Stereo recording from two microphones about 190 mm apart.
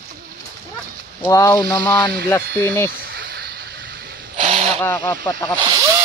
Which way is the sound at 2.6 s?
10° left (ahead or behind).